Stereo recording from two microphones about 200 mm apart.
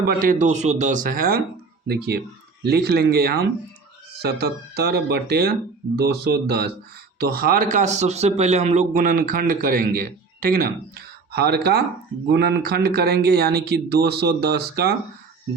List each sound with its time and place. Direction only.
0.0 s a man's voice: 45° right (ahead or behind)